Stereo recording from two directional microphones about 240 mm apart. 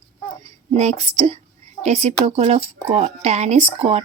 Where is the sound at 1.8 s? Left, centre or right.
Right.